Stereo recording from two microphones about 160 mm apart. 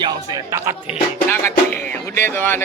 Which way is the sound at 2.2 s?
15° left (ahead or behind).